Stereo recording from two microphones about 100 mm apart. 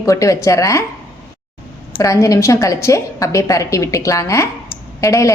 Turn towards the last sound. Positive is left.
turn(degrees=30)  # may be behind; listen again after turning